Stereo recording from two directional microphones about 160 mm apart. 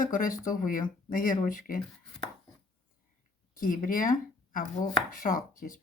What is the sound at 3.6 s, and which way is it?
Speech, 60° left (ahead or behind).